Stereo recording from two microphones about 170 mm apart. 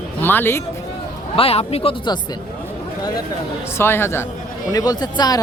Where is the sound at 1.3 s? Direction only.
35° left (ahead or behind).